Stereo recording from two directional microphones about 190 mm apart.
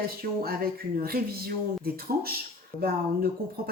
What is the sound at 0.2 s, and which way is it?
Speech, 55° right (ahead or behind).